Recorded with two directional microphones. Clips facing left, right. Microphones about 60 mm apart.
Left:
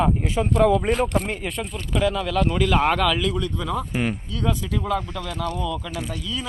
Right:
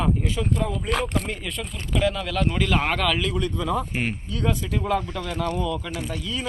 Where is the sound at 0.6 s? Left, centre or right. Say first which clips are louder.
Left 10 dB; left.